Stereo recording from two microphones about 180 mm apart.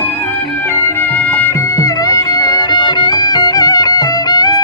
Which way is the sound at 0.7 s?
10° left (ahead or behind).